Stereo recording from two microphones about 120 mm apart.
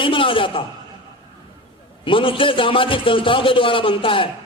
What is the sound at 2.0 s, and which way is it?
A man's voice, 45° left (ahead or behind).